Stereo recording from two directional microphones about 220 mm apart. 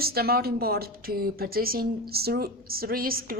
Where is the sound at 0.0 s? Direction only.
45° right (ahead or behind).